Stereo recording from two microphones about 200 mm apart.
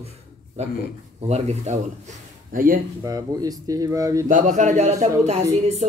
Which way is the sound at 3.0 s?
20° right (ahead or behind).